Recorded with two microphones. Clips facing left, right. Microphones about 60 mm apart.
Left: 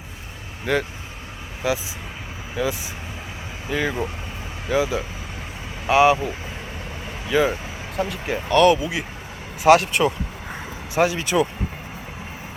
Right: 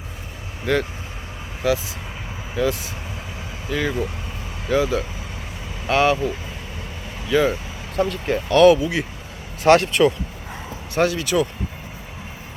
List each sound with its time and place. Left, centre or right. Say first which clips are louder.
0.6 s speech: right 1 dB; centre
10.9 s speech: even; centre
11.2 s speech: even; left